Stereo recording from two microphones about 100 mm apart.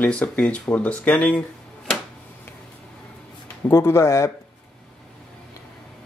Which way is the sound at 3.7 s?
25° left (ahead or behind).